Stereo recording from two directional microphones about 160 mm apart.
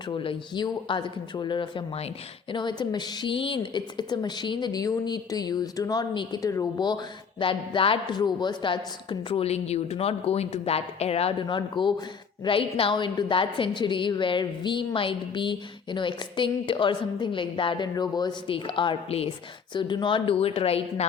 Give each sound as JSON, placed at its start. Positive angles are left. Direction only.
{"t": 0.1, "sound": "a woman's voice", "side_deg": 30}